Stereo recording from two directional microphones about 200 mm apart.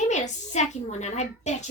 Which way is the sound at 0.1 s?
35° left (ahead or behind).